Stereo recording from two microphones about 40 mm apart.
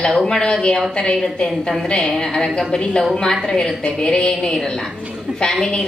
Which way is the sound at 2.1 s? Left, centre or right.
Centre.